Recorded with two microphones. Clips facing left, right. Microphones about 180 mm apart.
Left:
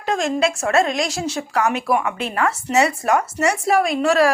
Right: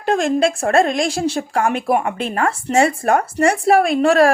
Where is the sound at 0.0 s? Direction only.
55° right (ahead or behind).